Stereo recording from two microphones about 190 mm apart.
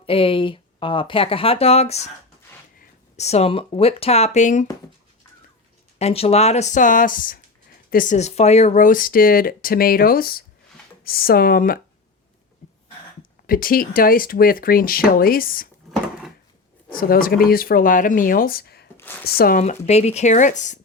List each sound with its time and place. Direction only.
0.0 s speech: 30° left (ahead or behind)
3.2 s speech: 35° left (ahead or behind)
6.0 s speech: 35° left (ahead or behind); by 11.8 s 50° left (ahead or behind)
13.5 s speech: 50° left (ahead or behind)
16.9 s speech: 50° left (ahead or behind)
18.9 s a sound: 10° left (ahead or behind)
19.2 s speech: 50° left (ahead or behind)